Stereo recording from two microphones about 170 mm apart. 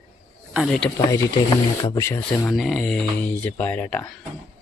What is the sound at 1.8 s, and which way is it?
Speech, 20° left (ahead or behind).